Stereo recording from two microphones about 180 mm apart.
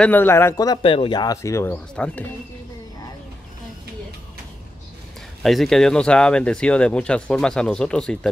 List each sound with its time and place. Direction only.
0.0 s speech: 10° left (ahead or behind)
5.4 s speech: centre (ahead or behind)